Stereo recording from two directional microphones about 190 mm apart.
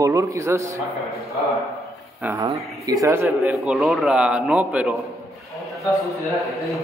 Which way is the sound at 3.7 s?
Centre (ahead or behind).